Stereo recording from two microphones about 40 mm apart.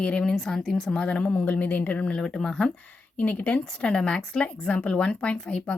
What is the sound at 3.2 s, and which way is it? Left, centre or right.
Speech, left.